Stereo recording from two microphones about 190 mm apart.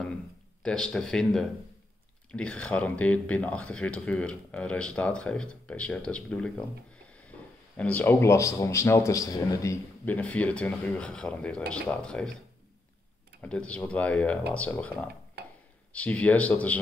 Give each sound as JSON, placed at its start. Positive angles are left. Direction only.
{"t": 0.6, "sound": "speech", "side_deg": 5}
{"t": 13.4, "sound": "speech", "side_deg": 5}
{"t": 15.4, "sound": "a sound", "side_deg": -60}
{"t": 15.9, "sound": "speech", "side_deg": 5}